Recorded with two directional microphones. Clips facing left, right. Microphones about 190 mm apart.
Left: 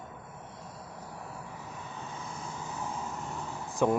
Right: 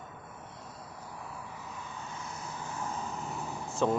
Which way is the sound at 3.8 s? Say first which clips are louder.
Left 2 dB; 10° left (ahead or behind).